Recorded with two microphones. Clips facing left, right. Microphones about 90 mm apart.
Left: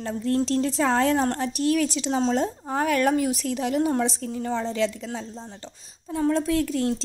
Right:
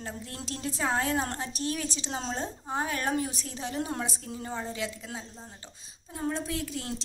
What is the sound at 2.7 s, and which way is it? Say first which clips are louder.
A woman's voice: left 8 dB; 70° left (ahead or behind).